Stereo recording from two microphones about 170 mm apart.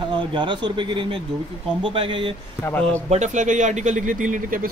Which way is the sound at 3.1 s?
45° right (ahead or behind).